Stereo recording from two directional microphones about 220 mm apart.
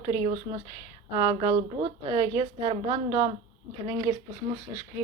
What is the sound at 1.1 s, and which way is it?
A woman's voice, 20° right (ahead or behind).